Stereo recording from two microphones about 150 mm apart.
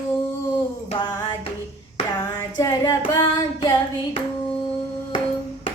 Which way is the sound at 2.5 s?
20° left (ahead or behind).